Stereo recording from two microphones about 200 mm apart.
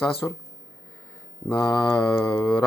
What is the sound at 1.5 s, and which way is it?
Speech, 20° left (ahead or behind).